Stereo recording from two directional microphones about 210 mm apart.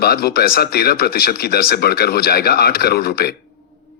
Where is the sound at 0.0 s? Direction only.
50° left (ahead or behind).